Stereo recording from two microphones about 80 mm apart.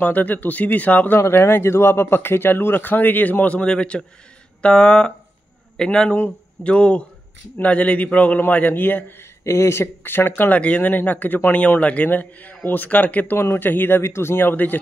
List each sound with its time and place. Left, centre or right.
0.0 s a man's voice: left
4.6 s a sound: centre
7.5 s a man's voice: centre
9.4 s a man's voice: left